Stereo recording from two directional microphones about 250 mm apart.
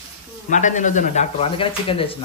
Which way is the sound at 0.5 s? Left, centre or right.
Left.